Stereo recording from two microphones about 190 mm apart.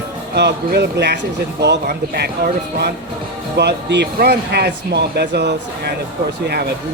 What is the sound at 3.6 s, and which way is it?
Speech, 65° right (ahead or behind).